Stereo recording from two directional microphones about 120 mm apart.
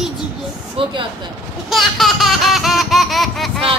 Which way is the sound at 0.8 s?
50° right (ahead or behind).